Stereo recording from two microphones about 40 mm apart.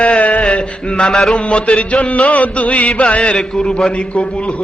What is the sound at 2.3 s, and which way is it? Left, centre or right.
A man's voice, left.